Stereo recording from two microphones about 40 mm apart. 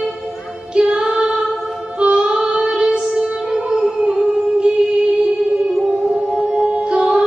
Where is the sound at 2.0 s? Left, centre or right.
Right.